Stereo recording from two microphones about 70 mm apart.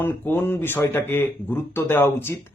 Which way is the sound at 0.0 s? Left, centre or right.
Left.